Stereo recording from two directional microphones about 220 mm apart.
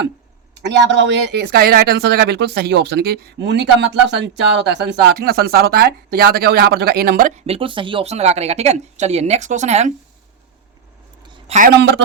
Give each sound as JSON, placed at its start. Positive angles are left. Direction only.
{"t": 0.6, "sound": "speech", "side_deg": -50}
{"t": 11.4, "sound": "a man's voice", "side_deg": -35}
{"t": 11.7, "sound": "speech", "side_deg": -50}